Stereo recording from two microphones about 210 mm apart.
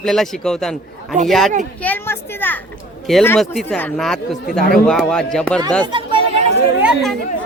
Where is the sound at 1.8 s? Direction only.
10° left (ahead or behind).